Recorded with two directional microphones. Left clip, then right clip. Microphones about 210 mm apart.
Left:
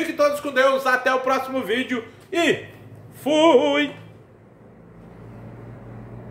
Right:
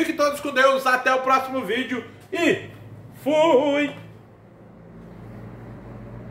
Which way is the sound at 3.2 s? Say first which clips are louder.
Left 2 dB; 50° left (ahead or behind).